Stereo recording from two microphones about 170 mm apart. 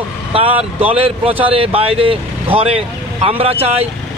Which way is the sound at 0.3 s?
35° right (ahead or behind).